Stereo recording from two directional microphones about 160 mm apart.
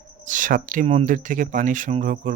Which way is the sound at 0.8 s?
45° right (ahead or behind).